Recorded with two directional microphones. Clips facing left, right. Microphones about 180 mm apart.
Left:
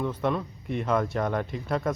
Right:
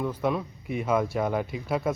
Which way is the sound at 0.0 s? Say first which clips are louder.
Even; 5° right (ahead or behind).